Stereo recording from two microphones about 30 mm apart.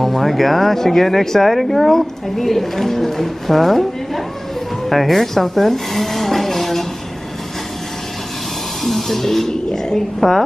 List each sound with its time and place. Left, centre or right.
0.0 s speech: centre
8.8 s music: centre
9.5 s speech: left
9.9 s speech: centre